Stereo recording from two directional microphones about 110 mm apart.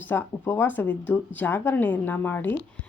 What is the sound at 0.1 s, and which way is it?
Speech, 20° left (ahead or behind).